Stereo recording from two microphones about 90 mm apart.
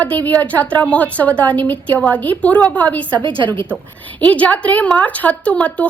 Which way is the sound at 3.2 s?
60° right (ahead or behind).